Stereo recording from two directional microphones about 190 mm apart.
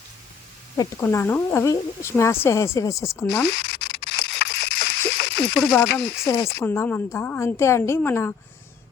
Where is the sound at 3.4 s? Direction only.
60° left (ahead or behind).